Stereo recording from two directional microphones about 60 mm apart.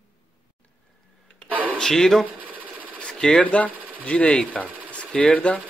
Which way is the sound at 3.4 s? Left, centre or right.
Left.